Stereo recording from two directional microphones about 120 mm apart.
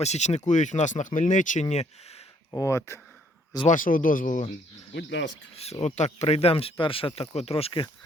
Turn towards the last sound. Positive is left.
turn(degrees=50)  # may be behind; listen again after turning